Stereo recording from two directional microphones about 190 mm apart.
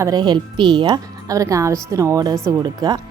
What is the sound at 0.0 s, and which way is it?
A woman's voice, 20° right (ahead or behind).